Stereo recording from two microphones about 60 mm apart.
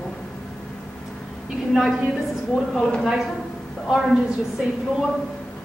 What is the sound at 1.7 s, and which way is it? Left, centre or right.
Speech, centre.